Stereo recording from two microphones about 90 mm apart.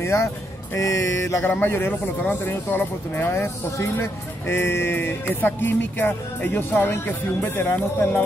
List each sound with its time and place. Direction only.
0.0 s speech: 30° left (ahead or behind)
0.7 s music: 35° left (ahead or behind)
1.4 s speech: 20° left (ahead or behind)